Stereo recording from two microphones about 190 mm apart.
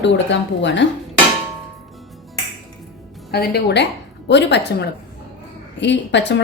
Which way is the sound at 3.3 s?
55° left (ahead or behind).